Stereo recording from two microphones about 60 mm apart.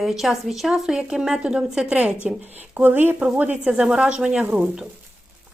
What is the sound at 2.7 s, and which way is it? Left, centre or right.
Speech, right.